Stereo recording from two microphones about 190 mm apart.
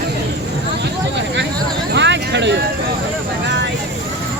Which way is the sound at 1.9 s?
65° right (ahead or behind).